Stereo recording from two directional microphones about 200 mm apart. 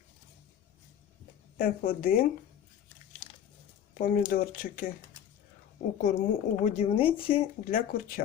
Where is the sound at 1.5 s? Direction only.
45° left (ahead or behind).